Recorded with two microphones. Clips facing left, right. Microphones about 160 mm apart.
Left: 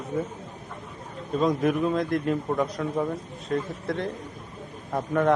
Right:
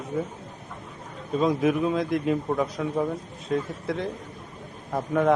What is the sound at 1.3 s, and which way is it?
A man's voice, centre (ahead or behind).